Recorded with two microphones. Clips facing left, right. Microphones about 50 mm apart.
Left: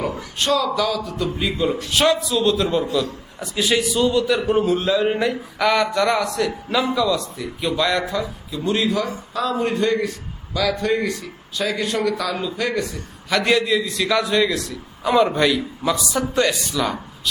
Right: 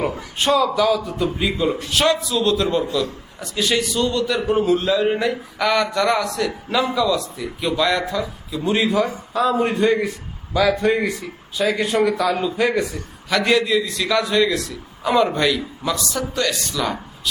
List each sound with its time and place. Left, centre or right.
0.3 s a man's voice: centre
1.5 s speech: centre
8.6 s a man's voice: centre
13.3 s speech: centre
16.2 s speech: left
16.7 s speech: centre